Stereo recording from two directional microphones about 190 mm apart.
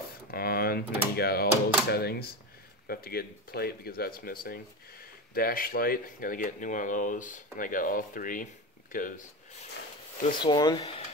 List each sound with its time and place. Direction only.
0.3 s speech: 50° left (ahead or behind)
10.4 s speech: 20° left (ahead or behind)